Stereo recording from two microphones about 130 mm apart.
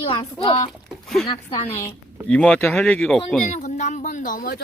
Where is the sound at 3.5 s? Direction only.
65° left (ahead or behind); by 4.5 s 90° left.